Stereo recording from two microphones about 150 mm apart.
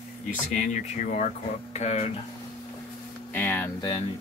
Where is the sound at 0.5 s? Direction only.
55° left (ahead or behind).